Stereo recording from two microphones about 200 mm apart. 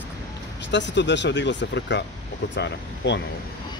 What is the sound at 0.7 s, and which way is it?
Speech, 65° left (ahead or behind).